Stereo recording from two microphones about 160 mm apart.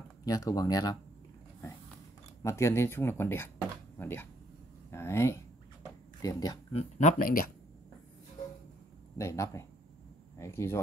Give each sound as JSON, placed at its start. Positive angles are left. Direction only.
{"t": 0.2, "sound": "speech", "side_deg": 20}
{"t": 2.4, "sound": "speech", "side_deg": 15}
{"t": 5.9, "sound": "a sound", "side_deg": 25}
{"t": 6.7, "sound": "speech", "side_deg": 45}
{"t": 9.2, "sound": "speech", "side_deg": 20}